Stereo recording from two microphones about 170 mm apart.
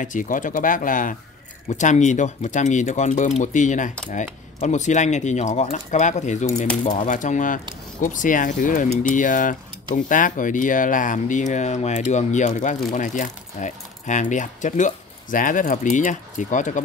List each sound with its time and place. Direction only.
0.0 s speech: 50° left (ahead or behind)